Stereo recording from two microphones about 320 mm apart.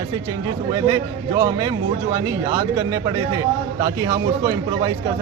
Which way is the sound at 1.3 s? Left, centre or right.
Centre.